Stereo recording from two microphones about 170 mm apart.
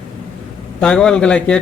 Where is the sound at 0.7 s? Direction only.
5° left (ahead or behind).